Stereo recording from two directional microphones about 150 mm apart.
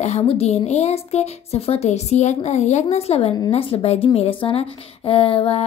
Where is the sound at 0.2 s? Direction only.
40° left (ahead or behind).